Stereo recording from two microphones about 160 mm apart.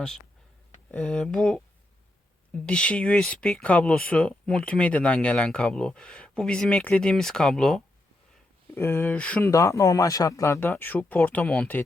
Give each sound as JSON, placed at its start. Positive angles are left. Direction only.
{"t": 0.9, "sound": "speech", "side_deg": 5}
{"t": 8.7, "sound": "speech", "side_deg": 15}
{"t": 9.5, "sound": "speech", "side_deg": 20}